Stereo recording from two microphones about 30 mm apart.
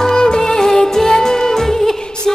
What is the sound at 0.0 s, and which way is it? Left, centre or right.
Music, left.